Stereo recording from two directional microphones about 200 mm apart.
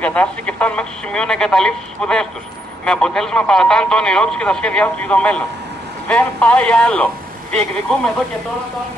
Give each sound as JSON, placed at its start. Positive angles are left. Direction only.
{"t": 0.0, "sound": "a man's voice", "side_deg": 5}